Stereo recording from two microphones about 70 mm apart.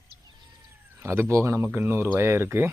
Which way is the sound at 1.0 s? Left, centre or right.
Right.